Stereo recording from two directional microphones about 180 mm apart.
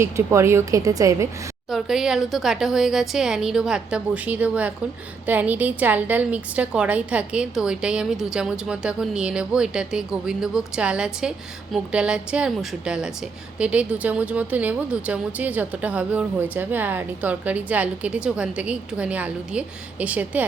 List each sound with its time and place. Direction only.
0.0 s speech: 15° right (ahead or behind)
1.7 s a woman's voice: centre (ahead or behind)